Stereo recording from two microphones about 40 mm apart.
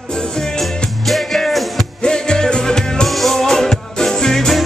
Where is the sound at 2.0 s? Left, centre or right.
Centre.